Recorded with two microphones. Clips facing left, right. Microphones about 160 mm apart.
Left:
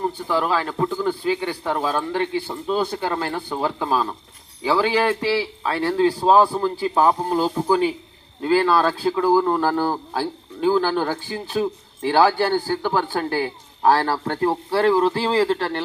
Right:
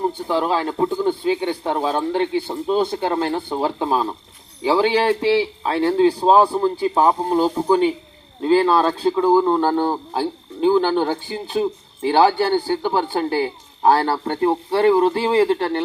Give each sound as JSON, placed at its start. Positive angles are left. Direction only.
{"t": 0.1, "sound": "a man's voice", "side_deg": -25}
{"t": 8.4, "sound": "a man's voice", "side_deg": -25}